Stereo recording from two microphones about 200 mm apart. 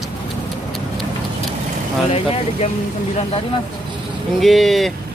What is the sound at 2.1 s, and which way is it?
Speech, 30° left (ahead or behind).